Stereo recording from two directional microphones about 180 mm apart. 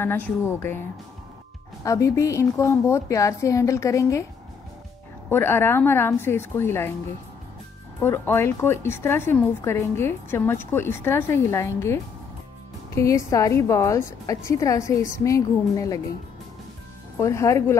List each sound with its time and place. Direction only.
0.0 s a woman's voice: 10° left (ahead or behind)
1.9 s a woman's voice: 15° left (ahead or behind)
5.3 s a woman's voice: 10° left (ahead or behind)
8.0 s a woman's voice: 15° left (ahead or behind)
17.2 s a woman's voice: 15° left (ahead or behind)